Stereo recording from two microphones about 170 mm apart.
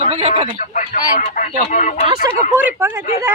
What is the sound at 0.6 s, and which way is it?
Speech, 50° left (ahead or behind).